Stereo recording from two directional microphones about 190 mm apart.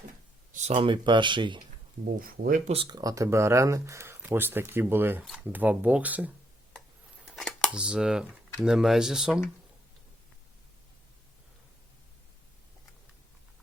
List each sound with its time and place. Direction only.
0.5 s speech: 35° right (ahead or behind)
2.0 s speech: 50° right (ahead or behind)
2.7 s speech: 25° right (ahead or behind); by 6.3 s 10° right (ahead or behind)
7.3 s camera: centre (ahead or behind)
8.6 s speech: centre (ahead or behind)